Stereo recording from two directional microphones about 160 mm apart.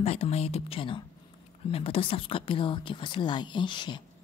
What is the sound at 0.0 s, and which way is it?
A woman's voice, 40° left (ahead or behind).